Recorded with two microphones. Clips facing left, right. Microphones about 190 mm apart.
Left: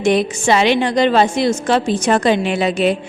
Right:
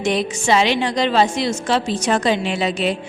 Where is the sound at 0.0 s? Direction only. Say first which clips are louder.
Left 5 dB; 55° left (ahead or behind).